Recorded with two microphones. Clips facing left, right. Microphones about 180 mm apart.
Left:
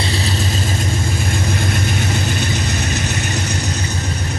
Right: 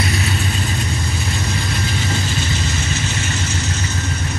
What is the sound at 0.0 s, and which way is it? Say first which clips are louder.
Vehicle: even; 30° left (ahead or behind).